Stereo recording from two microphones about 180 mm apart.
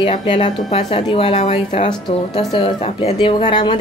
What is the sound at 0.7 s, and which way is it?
A woman's voice, 40° left (ahead or behind).